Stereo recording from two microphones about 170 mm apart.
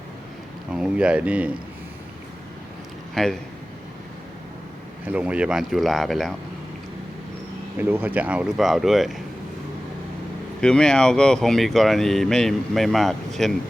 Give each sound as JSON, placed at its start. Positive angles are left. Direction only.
{"t": 0.7, "sound": "speech", "side_deg": -5}
{"t": 3.2, "sound": "speech", "side_deg": 0}
{"t": 5.0, "sound": "speech", "side_deg": -5}
{"t": 7.8, "sound": "speech", "side_deg": -10}
{"t": 10.6, "sound": "speech", "side_deg": 5}